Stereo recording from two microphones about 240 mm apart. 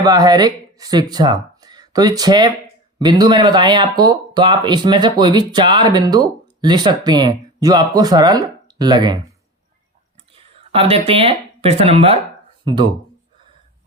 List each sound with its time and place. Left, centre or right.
0.0 s speech: centre
10.3 s speech: right